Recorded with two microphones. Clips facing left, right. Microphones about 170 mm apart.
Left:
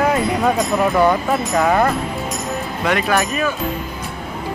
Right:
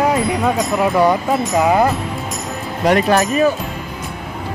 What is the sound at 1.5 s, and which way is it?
Speech, 15° right (ahead or behind).